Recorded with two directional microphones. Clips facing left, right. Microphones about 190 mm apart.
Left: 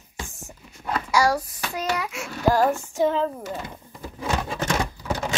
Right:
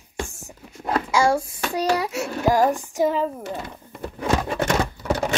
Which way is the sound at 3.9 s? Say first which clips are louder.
Right 5 dB; 65° right (ahead or behind).